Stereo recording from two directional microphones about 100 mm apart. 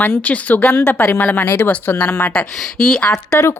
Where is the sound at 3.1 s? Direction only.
25° left (ahead or behind).